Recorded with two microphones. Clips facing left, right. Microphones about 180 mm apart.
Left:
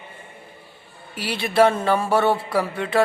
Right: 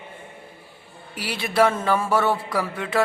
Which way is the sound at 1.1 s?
25° left (ahead or behind).